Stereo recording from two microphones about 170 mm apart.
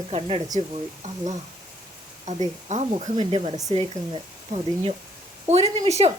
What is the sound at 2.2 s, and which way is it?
Speech, 40° right (ahead or behind).